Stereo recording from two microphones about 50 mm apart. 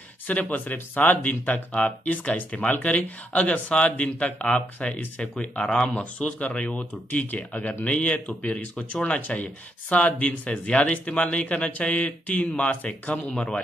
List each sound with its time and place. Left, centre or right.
0.3 s speech: left
1.7 s speech: left
13.2 s speech: centre